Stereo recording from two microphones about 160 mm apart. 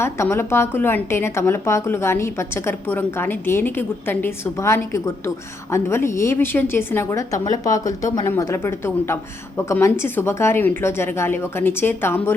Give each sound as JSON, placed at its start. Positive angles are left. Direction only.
{"t": 0.0, "sound": "a woman's voice", "side_deg": 15}